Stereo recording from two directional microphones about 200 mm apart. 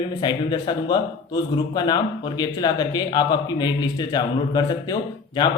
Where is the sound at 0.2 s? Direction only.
20° left (ahead or behind).